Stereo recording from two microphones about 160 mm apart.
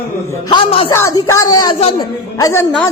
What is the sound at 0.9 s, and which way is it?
Speech, 15° left (ahead or behind).